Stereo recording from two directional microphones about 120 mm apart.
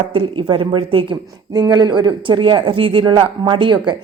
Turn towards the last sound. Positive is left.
turn(degrees=-40)  # may be behind; listen again after turning